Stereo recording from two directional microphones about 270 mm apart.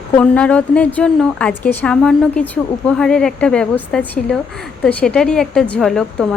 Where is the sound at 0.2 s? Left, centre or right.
Centre.